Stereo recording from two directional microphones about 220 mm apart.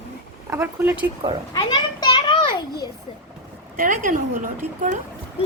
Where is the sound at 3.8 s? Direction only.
40° right (ahead or behind).